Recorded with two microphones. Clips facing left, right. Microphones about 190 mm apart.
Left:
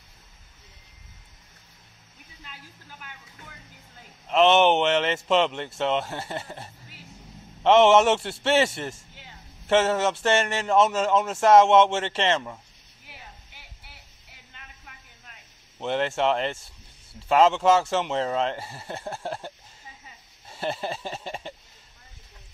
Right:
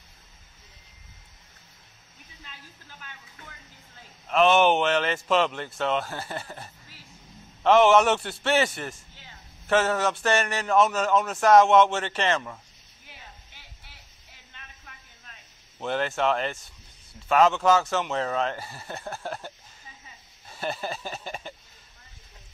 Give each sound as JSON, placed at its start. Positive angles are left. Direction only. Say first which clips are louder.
{"t": 4.3, "sound": "a man's voice", "louder": "left 1 dB", "side_deg": 20}
{"t": 15.8, "sound": "a man's voice", "louder": "left 2 dB", "side_deg": 25}